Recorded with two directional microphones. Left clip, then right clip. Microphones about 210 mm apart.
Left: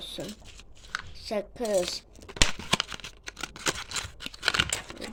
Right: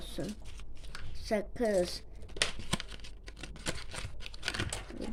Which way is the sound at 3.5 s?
Centre (ahead or behind).